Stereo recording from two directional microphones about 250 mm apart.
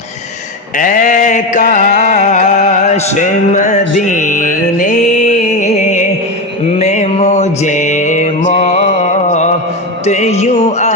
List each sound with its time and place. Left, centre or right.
0.8 s music: left
8.4 s mantra: left
10.1 s a sound: left